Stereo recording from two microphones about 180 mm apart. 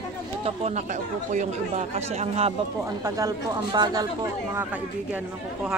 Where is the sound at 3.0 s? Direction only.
20° right (ahead or behind).